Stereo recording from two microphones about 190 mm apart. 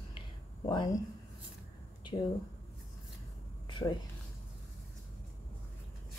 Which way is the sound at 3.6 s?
25° left (ahead or behind).